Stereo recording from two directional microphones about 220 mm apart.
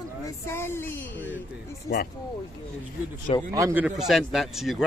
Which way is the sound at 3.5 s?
15° right (ahead or behind).